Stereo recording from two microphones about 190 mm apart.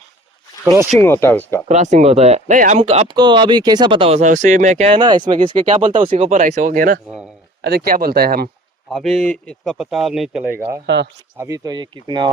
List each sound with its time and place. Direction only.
0.6 s speech: 15° right (ahead or behind)
0.9 s speech: 10° left (ahead or behind)
1.6 s speech: 40° right (ahead or behind)
5.6 s speech: 40° right (ahead or behind)
6.0 s speech: 30° right (ahead or behind); by 8.4 s 55° right (ahead or behind)
8.9 s speech: centre (ahead or behind)
10.8 s speech: 65° right (ahead or behind)
11.3 s speech: 15° right (ahead or behind)